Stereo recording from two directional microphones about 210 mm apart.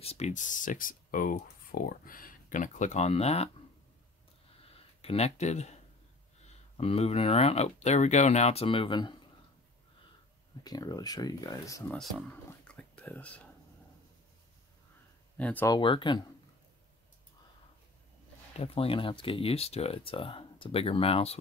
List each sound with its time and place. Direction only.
0.0 s speech: 30° left (ahead or behind)
5.0 s speech: 30° left (ahead or behind)
6.8 s speech: 30° left (ahead or behind)
10.6 s speech: 20° left (ahead or behind)
12.0 s speech: centre (ahead or behind)
12.4 s whispering: 5° left (ahead or behind)
15.3 s speech: 10° left (ahead or behind); by 16.2 s 25° left (ahead or behind)
18.6 s speech: 25° left (ahead or behind)